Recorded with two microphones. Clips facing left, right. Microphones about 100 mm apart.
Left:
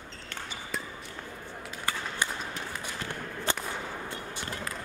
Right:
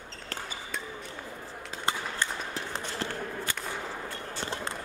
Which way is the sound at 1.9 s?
25° right (ahead or behind).